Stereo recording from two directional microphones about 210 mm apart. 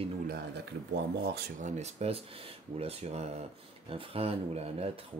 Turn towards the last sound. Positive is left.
turn(degrees=-30)  # may be behind; listen again after turning